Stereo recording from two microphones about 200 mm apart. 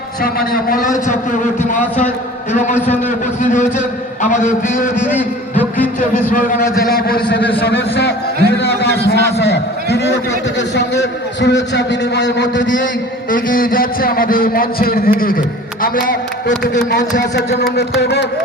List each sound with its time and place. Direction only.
0.2 s a man's voice: 45° left (ahead or behind)
2.5 s a man's voice: 35° left (ahead or behind)
6.0 s a man's voice: 40° left (ahead or behind); by 10.1 s 55° left (ahead or behind)
11.3 s a man's voice: 60° left (ahead or behind)
13.3 s a man's voice: 45° left (ahead or behind)
16.5 s a man's voice: 60° left (ahead or behind)